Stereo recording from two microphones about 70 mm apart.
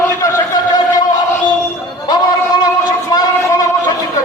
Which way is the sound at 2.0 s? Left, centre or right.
Left.